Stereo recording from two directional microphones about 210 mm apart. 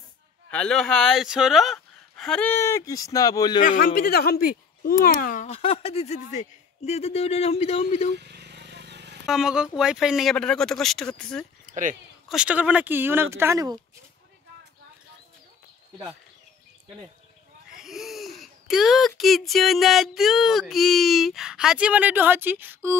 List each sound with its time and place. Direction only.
0.5 s speech: 5° left (ahead or behind)
3.6 s speech: 40° left (ahead or behind)
5.5 s speech: 30° left (ahead or behind)
8.2 s a sound: 55° right (ahead or behind)
9.2 s speech: centre (ahead or behind)
11.6 s speech: 40° right (ahead or behind)
12.3 s speech: 5° right (ahead or behind)
17.7 s speech: centre (ahead or behind)